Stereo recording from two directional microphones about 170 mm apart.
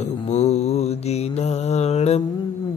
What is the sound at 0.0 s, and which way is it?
Mantra, 40° left (ahead or behind).